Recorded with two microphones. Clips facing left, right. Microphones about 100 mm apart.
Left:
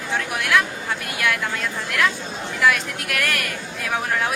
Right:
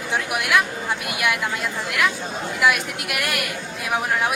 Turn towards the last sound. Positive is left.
turn(degrees=-15)  # may be behind; listen again after turning